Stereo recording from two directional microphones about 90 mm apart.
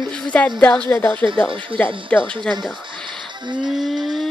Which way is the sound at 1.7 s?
75° right (ahead or behind).